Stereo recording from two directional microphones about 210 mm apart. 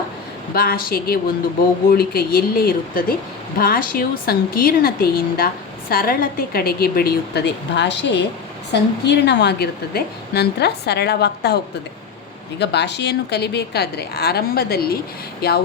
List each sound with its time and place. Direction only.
0.5 s a woman's voice: 45° left (ahead or behind)